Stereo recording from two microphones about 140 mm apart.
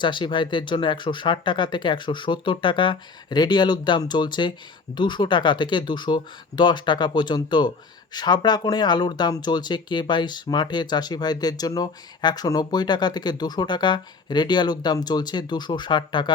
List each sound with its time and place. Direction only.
0.0 s speech: 35° left (ahead or behind)